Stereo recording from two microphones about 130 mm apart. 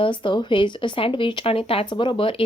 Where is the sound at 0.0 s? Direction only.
40° left (ahead or behind).